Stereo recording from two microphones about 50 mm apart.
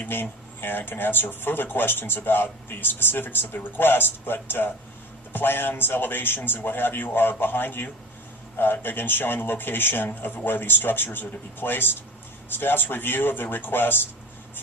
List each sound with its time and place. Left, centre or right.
0.0 s speech: left